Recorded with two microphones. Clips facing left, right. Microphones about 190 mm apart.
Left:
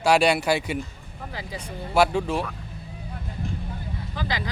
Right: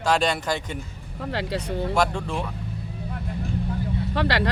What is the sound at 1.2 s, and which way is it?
Speech, 75° right (ahead or behind).